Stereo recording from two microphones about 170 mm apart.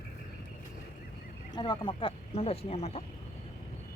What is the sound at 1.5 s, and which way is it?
A woman's voice, 25° left (ahead or behind).